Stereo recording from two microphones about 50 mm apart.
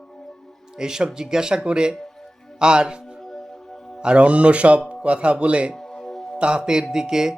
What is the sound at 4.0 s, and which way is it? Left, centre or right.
Speech, right.